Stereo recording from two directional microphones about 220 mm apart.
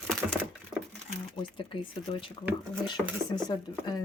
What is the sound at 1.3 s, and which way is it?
Speech, 25° left (ahead or behind).